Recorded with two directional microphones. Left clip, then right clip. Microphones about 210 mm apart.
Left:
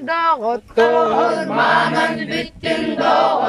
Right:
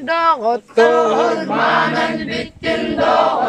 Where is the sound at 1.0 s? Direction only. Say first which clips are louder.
Right 1 dB; 50° right (ahead or behind).